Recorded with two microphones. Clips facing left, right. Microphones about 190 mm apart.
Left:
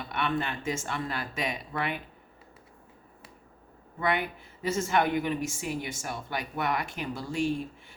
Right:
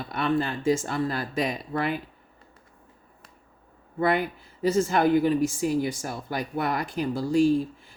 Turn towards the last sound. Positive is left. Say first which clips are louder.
# right 9 dB
turn(degrees=-35)  # may be behind; listen again after turning